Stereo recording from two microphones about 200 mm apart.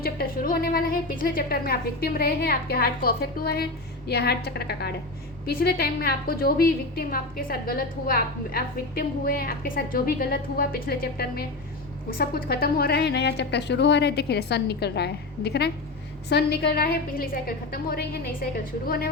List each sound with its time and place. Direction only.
0.0 s a woman's voice: 50° left (ahead or behind)